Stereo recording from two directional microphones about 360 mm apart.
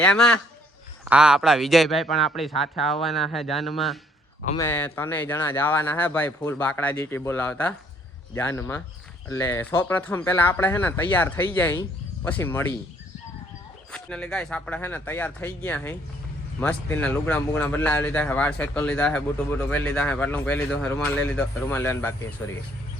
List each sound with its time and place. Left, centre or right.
0.0 s speech: centre
13.9 s speech: centre